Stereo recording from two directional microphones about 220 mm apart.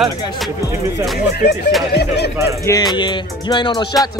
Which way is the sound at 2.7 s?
20° left (ahead or behind).